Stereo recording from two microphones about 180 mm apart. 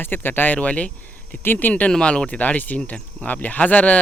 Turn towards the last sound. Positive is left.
turn(degrees=10)  # may be behind; listen again after turning